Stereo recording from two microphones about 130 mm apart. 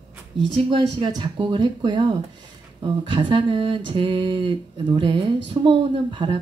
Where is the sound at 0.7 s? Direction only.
35° right (ahead or behind).